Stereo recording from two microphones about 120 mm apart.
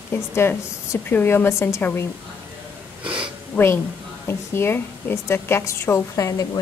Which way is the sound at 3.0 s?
45° right (ahead or behind).